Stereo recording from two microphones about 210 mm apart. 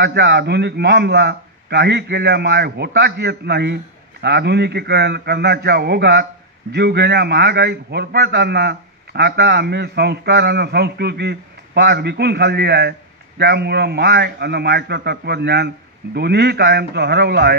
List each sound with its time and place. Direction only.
0.0 s a man's voice: 55° right (ahead or behind)